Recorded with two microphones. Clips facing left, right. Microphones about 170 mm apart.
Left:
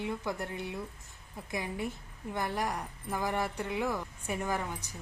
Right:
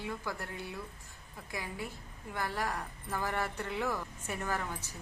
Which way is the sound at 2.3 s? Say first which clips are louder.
Left 3 dB; 20° left (ahead or behind).